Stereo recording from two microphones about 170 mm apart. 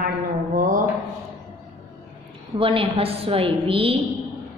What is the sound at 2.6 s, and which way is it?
A woman's voice, 30° right (ahead or behind).